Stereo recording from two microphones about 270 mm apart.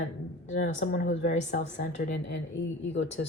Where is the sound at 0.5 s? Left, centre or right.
Left.